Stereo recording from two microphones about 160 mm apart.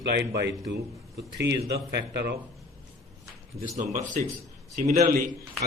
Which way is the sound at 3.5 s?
40° right (ahead or behind).